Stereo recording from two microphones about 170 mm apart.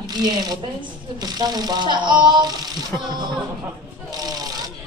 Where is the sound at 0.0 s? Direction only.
25° right (ahead or behind).